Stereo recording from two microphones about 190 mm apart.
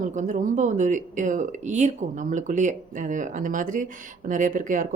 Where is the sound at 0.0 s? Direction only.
40° right (ahead or behind).